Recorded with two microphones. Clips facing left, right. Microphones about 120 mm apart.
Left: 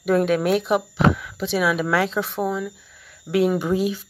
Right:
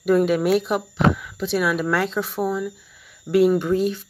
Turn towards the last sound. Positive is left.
turn(degrees=5)  # may be behind; listen again after turning